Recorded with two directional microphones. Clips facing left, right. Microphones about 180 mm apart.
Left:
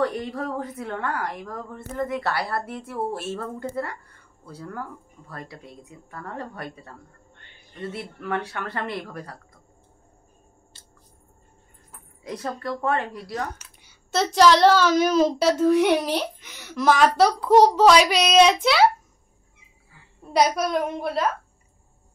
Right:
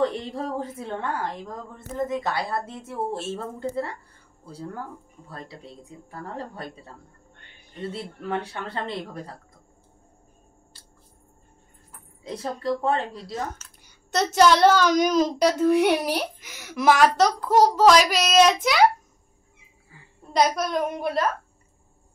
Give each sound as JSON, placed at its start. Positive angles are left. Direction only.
{"t": 0.0, "sound": "a woman's voice", "side_deg": -25}
{"t": 7.8, "sound": "a woman's voice", "side_deg": -30}
{"t": 12.2, "sound": "a woman's voice", "side_deg": -25}
{"t": 14.1, "sound": "a child's voice", "side_deg": 0}
{"t": 15.8, "sound": "a child's voice", "side_deg": -10}
{"t": 20.3, "sound": "speech", "side_deg": 5}